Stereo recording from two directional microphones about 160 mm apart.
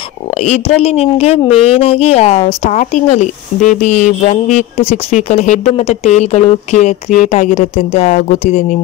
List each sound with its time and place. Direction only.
0.4 s a woman's voice: 40° left (ahead or behind)